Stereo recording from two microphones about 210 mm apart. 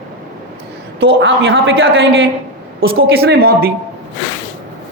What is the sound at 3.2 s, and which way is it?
Speech, 50° right (ahead or behind).